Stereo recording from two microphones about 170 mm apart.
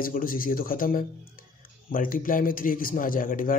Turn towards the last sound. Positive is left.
turn(degrees=55)  # may be behind; listen again after turning